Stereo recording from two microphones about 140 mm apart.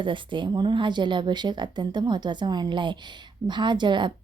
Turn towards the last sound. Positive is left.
turn(degrees=-35)  # may be behind; listen again after turning